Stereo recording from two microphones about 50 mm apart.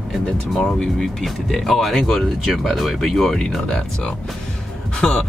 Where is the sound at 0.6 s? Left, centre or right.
Centre.